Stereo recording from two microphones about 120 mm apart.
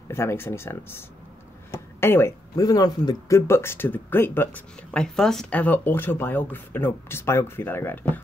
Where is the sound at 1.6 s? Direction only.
20° left (ahead or behind).